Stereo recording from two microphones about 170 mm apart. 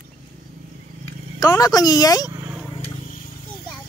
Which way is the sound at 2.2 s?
20° right (ahead or behind).